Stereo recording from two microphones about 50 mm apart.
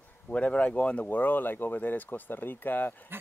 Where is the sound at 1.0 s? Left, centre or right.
Left.